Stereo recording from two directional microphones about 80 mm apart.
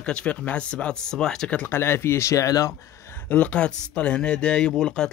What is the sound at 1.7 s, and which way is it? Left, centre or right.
Speech, left.